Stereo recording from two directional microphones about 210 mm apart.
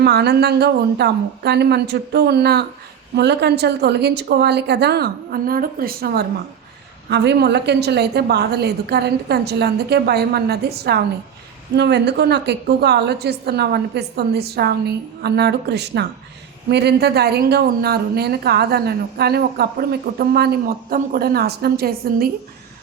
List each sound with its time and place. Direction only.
0.0 s a woman's voice: 50° right (ahead or behind)